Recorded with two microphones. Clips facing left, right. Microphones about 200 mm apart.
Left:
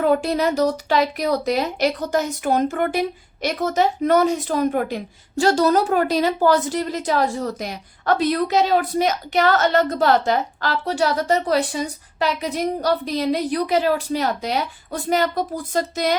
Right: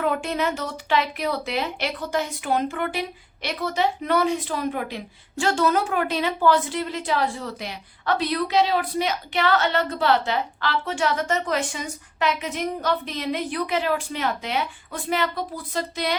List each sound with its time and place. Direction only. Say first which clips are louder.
0.0 s a woman's voice: left 6 dB; 35° left (ahead or behind)